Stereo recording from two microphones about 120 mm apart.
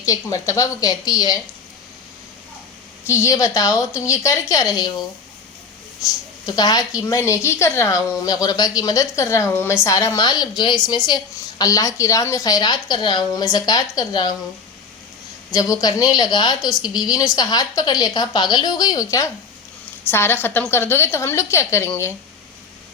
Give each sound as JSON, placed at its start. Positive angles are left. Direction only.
{"t": 0.0, "sound": "a woman's voice", "side_deg": 25}
{"t": 3.1, "sound": "a woman's voice", "side_deg": 25}
{"t": 6.1, "sound": "a woman's voice", "side_deg": 35}
{"t": 15.5, "sound": "a woman's voice", "side_deg": 30}
{"t": 16.6, "sound": "a woman's voice", "side_deg": 0}
{"t": 16.9, "sound": "a woman's voice", "side_deg": 35}